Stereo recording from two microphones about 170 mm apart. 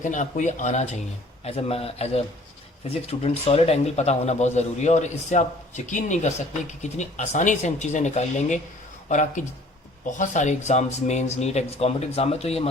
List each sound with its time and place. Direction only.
0.0 s a man's voice: 50° left (ahead or behind)